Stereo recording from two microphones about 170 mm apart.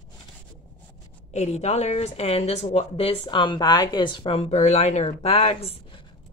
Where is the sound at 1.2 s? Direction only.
40° left (ahead or behind).